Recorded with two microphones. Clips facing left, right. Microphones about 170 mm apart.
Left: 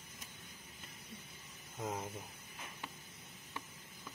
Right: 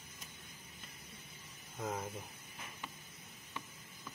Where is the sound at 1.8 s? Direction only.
10° left (ahead or behind).